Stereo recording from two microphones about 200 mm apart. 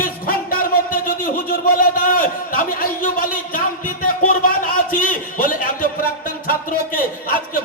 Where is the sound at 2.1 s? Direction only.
45° left (ahead or behind).